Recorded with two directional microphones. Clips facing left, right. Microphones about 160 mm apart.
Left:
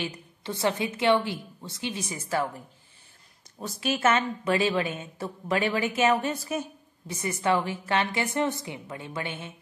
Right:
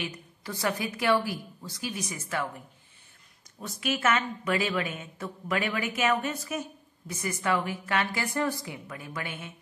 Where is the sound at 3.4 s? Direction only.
30° left (ahead or behind).